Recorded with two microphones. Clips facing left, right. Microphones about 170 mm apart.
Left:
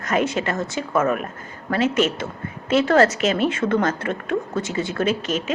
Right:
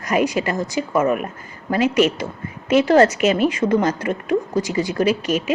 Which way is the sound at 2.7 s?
15° right (ahead or behind).